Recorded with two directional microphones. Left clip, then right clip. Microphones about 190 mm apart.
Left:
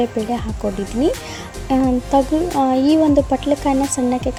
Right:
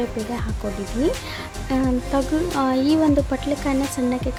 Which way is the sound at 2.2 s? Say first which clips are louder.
Left 5 dB; 5° left (ahead or behind).